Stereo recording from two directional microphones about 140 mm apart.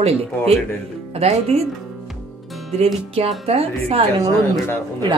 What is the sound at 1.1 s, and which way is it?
Speech, 50° right (ahead or behind).